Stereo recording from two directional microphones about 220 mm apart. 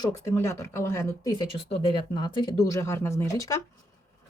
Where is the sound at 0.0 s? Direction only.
15° left (ahead or behind).